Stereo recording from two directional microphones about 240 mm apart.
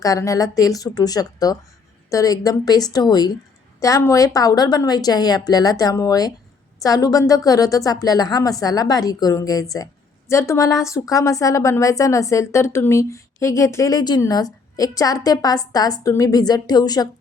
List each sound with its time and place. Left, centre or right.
0.0 s a woman's voice: centre